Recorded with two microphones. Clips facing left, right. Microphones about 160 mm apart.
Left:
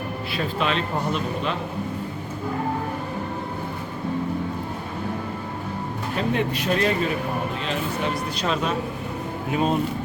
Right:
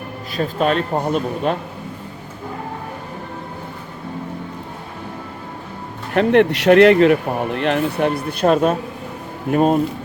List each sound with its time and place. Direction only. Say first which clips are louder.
0.3 s a man's voice: right 7 dB; 45° right (ahead or behind)
6.1 s a man's voice: right 11 dB; 65° right (ahead or behind); by 9.7 s 50° right (ahead or behind)